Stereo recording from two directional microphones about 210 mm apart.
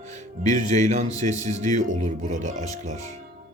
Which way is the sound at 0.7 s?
35° right (ahead or behind).